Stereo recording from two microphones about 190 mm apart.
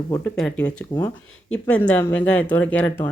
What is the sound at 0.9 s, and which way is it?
Speech, 25° left (ahead or behind).